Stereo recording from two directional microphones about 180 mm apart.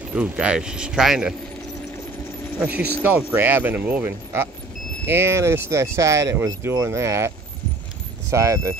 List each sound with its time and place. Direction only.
0.1 s speech: 5° right (ahead or behind)
3.0 s speech: 10° right (ahead or behind)